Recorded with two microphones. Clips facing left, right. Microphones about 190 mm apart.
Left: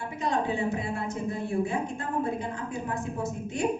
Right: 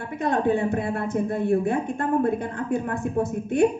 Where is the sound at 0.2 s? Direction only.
55° right (ahead or behind).